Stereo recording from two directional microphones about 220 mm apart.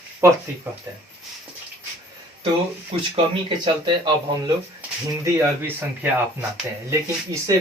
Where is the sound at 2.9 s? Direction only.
25° right (ahead or behind).